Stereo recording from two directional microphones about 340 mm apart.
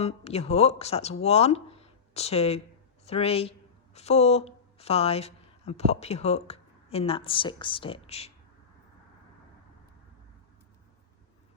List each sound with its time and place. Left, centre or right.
0.0 s speech: centre